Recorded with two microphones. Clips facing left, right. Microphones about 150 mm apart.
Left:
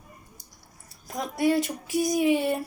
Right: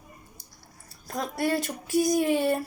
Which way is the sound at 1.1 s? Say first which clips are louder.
Left 3 dB; 15° left (ahead or behind).